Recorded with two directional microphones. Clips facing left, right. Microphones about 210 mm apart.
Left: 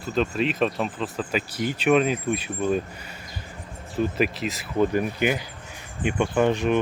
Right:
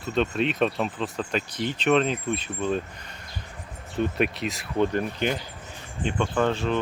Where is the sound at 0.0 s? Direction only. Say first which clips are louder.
Left 1 dB; centre (ahead or behind).